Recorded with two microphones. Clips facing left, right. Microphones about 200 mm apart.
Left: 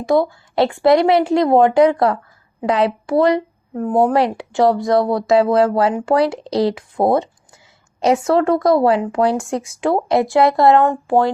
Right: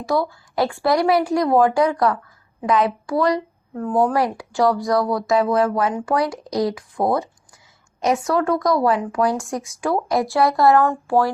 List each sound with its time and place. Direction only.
0.0 s speech: 20° left (ahead or behind)
8.3 s speech: 25° left (ahead or behind)